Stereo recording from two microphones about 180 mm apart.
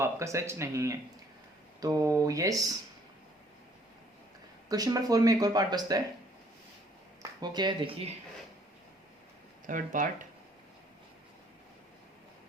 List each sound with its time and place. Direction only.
0.0 s speech: 15° right (ahead or behind)
4.7 s speech: 20° right (ahead or behind)
7.2 s speech: 25° right (ahead or behind)
9.6 s speech: 45° right (ahead or behind)